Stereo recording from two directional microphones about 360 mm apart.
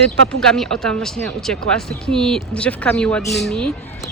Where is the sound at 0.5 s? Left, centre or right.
Centre.